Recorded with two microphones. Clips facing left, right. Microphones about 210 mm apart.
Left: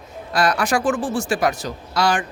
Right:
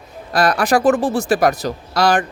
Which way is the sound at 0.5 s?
35° right (ahead or behind).